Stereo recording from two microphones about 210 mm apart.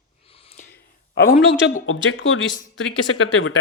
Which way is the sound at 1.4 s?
55° left (ahead or behind).